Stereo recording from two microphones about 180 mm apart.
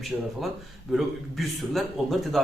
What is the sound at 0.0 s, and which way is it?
A man's voice, centre (ahead or behind).